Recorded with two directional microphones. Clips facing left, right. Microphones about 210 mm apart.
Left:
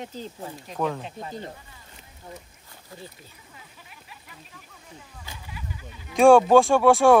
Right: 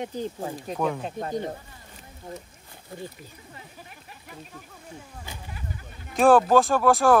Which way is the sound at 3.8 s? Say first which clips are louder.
Right 3 dB; 50° right (ahead or behind).